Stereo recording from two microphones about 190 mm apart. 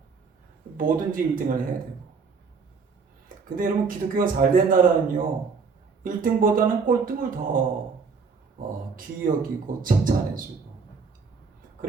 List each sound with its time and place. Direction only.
0.8 s speech: 45° right (ahead or behind)
3.2 s speech: 45° right (ahead or behind)
9.0 s speech: 45° right (ahead or behind)